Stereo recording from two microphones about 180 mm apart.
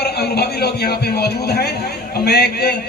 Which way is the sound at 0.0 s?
65° left (ahead or behind).